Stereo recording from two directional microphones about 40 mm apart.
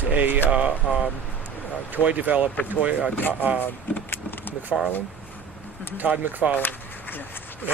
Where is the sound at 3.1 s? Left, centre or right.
Left.